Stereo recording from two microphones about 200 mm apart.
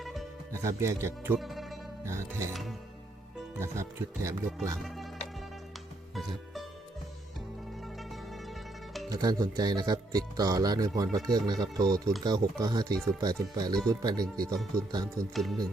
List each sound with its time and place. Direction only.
0.0 s music: centre (ahead or behind)
0.5 s speech: 15° right (ahead or behind)
1.4 s music: centre (ahead or behind)
2.0 s speech: 15° right (ahead or behind)
2.5 s speech: centre (ahead or behind)
3.6 s speech: 15° right (ahead or behind)
6.1 s music: centre (ahead or behind)
7.9 s music: centre (ahead or behind)
9.0 s speech: 20° right (ahead or behind)
14.4 s speech: centre (ahead or behind)
14.8 s speech: 20° right (ahead or behind)
15.4 s speech: centre (ahead or behind)